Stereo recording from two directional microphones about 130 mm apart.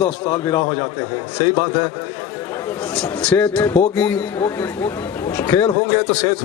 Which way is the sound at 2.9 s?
10° left (ahead or behind).